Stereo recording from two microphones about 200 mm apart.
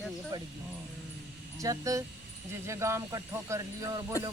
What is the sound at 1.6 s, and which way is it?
Speech, 15° right (ahead or behind).